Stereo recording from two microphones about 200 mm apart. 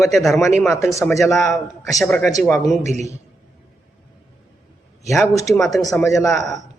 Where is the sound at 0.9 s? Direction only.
15° left (ahead or behind).